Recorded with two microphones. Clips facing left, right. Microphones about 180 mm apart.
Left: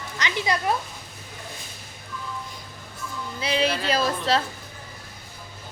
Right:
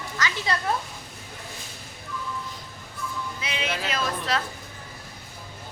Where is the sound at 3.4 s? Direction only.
35° left (ahead or behind).